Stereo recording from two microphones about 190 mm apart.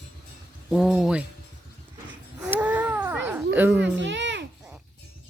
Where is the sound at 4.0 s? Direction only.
70° right (ahead or behind).